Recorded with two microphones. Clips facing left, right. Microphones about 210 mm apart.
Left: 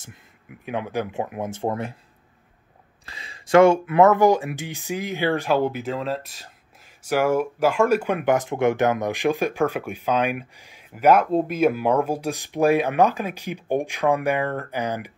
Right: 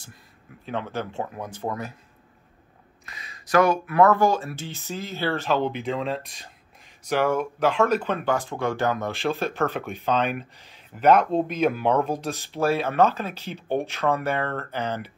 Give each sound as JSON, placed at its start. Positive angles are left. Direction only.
{"t": 0.7, "sound": "speech", "side_deg": 15}
{"t": 3.1, "sound": "speech", "side_deg": 30}